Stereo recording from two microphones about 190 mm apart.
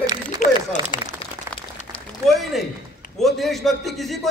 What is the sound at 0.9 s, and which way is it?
Speech, 25° left (ahead or behind).